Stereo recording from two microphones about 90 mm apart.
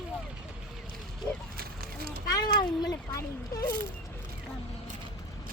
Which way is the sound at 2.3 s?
45° left (ahead or behind).